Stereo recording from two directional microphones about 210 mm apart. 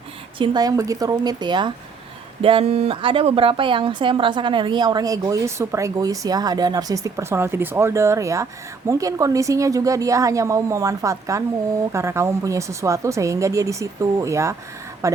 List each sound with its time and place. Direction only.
0.3 s a woman's voice: 20° right (ahead or behind)